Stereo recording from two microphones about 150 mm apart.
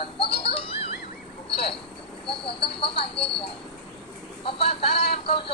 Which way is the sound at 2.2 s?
35° left (ahead or behind).